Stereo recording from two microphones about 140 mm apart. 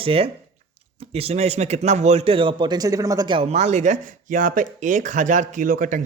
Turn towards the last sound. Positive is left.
turn(degrees=-70)  # may be behind; listen again after turning